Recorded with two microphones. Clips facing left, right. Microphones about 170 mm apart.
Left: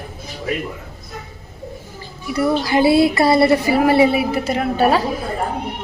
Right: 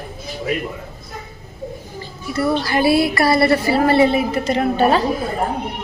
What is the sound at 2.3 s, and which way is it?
Speech, 15° left (ahead or behind).